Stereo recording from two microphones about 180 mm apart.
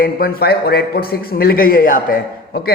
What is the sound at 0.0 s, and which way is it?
A man's voice, 55° left (ahead or behind).